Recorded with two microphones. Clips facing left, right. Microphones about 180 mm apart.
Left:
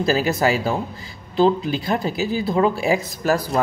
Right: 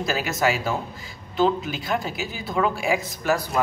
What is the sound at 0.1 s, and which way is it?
Speech, 35° left (ahead or behind).